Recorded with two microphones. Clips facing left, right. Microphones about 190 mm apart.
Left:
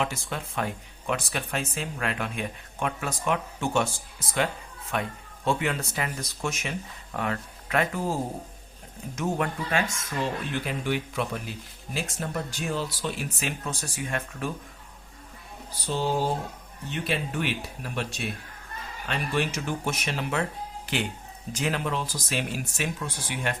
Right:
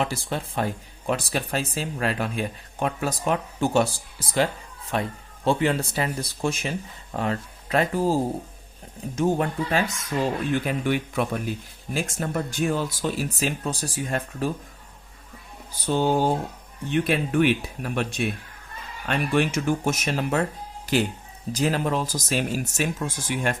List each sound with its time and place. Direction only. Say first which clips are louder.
0.0 s speech: right 3 dB; 35° right (ahead or behind)
10.5 s speech: right 5 dB; 50° right (ahead or behind)
13.4 s speech: right 5 dB; 35° right (ahead or behind)
15.9 s speech: right 5 dB; 55° right (ahead or behind)